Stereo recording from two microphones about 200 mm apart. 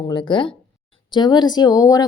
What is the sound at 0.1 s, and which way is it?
Speech, 20° left (ahead or behind).